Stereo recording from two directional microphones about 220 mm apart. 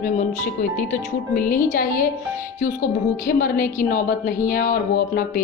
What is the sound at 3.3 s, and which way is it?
A woman's voice, 40° left (ahead or behind).